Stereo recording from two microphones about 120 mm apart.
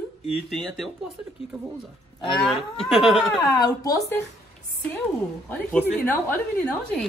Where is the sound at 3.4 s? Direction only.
35° left (ahead or behind).